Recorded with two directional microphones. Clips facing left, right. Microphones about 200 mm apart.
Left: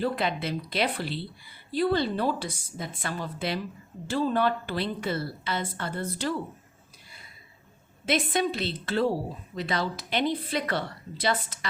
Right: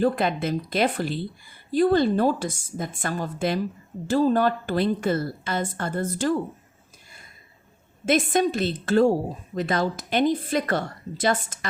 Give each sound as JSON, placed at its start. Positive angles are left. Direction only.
{"t": 0.0, "sound": "a woman's voice", "side_deg": -45}
{"t": 8.0, "sound": "a woman's voice", "side_deg": -45}